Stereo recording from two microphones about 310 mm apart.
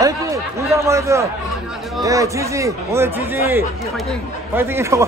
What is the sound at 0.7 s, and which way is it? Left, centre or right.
A man's voice, centre.